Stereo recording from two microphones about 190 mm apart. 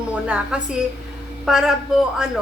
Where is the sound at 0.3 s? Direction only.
5° right (ahead or behind).